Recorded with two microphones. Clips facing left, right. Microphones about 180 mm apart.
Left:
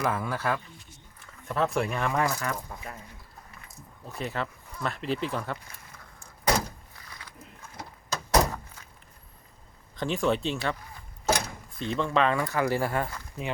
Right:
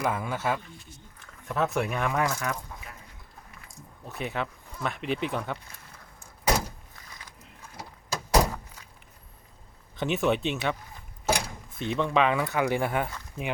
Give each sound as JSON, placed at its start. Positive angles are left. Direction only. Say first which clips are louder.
{"t": 0.0, "sound": "a man's voice", "louder": "even", "side_deg": -10}
{"t": 1.5, "sound": "speech", "louder": "even", "side_deg": 0}
{"t": 4.2, "sound": "speech", "louder": "right 1 dB", "side_deg": 0}
{"t": 5.0, "sound": "speech", "louder": "even", "side_deg": -60}
{"t": 5.3, "sound": "speech", "louder": "right 1 dB", "side_deg": 0}
{"t": 7.8, "sound": "door", "louder": "even", "side_deg": -10}
{"t": 9.9, "sound": "speech", "louder": "right 1 dB", "side_deg": -5}